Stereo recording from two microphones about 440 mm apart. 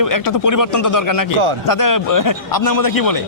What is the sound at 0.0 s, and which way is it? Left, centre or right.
A man's voice, left.